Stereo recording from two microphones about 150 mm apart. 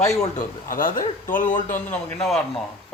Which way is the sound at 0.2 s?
60° left (ahead or behind).